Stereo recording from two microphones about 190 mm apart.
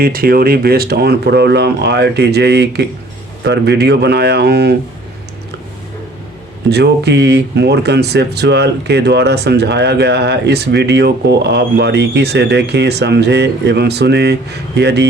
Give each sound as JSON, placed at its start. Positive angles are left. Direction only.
{"t": 0.0, "sound": "speech", "side_deg": -50}
{"t": 6.7, "sound": "speech", "side_deg": -60}